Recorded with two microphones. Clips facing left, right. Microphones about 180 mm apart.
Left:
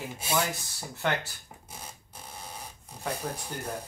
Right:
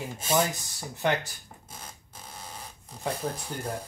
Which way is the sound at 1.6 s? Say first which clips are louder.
Left 1 dB; 10° left (ahead or behind).